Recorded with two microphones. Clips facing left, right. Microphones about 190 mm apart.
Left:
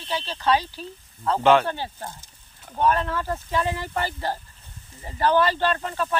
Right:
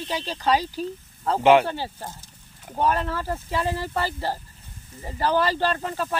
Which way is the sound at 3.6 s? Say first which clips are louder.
Right 2 dB; 35° right (ahead or behind).